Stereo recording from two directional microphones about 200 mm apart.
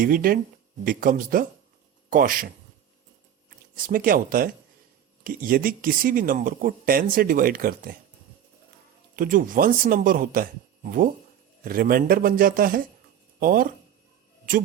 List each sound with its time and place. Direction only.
0.0 s speech: 45° right (ahead or behind)
3.8 s speech: 45° right (ahead or behind)
9.1 s speech: 45° right (ahead or behind)
11.6 s speech: 45° right (ahead or behind)